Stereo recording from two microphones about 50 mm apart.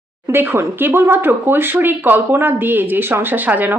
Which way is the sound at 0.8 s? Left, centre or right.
Right.